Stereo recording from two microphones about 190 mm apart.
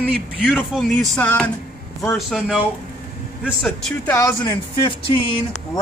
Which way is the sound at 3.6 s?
Centre (ahead or behind).